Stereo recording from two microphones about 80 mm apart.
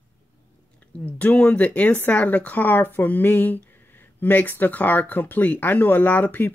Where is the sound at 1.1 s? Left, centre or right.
Centre.